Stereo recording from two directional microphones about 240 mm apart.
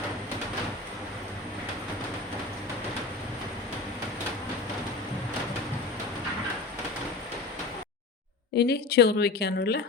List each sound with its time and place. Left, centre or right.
8.5 s a woman's voice: left